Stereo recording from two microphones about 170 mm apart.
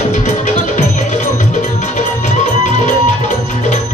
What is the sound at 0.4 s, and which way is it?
Music, 45° left (ahead or behind).